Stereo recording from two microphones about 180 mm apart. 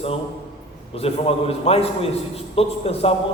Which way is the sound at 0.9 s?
35° left (ahead or behind).